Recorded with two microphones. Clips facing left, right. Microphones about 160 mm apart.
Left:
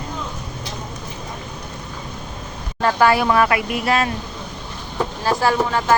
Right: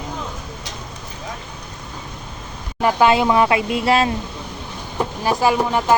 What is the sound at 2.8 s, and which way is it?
Speech, 15° right (ahead or behind).